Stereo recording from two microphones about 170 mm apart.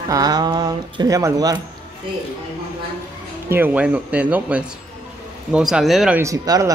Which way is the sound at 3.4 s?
10° right (ahead or behind).